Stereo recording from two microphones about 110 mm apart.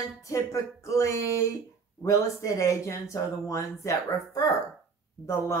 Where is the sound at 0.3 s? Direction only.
30° left (ahead or behind).